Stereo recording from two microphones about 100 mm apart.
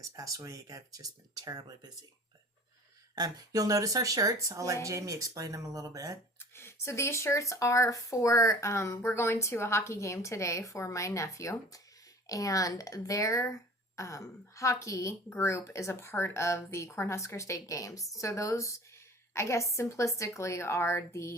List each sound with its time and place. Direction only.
0.2 s speech: 35° right (ahead or behind)
3.2 s speech: 40° right (ahead or behind)
6.5 s speech: 25° left (ahead or behind)